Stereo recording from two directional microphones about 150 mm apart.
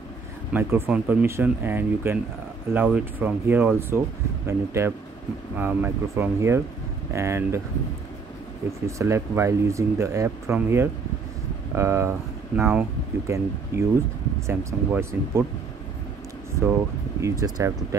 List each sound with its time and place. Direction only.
0.5 s speech: 15° right (ahead or behind)
8.8 s speech: 20° right (ahead or behind)
17.2 s speech: 20° right (ahead or behind)